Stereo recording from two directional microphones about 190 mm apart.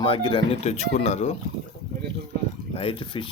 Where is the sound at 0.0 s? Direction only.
25° left (ahead or behind).